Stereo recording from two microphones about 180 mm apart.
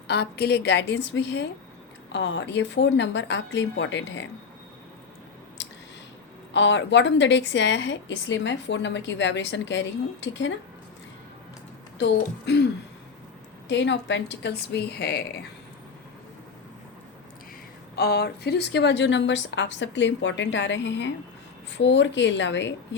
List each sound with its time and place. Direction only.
0.1 s a woman's voice: 65° left (ahead or behind); by 4.3 s 80° left
5.6 s a sound: 80° left
6.5 s a woman's voice: 85° left
12.5 s a woman's voice: 65° left (ahead or behind)
13.7 s a woman's voice: 75° left (ahead or behind)
14.7 s a woman's voice: 65° left (ahead or behind)
17.9 s a woman's voice: 60° left (ahead or behind); by 23.0 s 85° left